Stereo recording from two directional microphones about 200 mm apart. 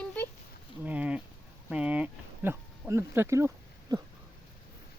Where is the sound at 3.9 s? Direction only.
20° right (ahead or behind).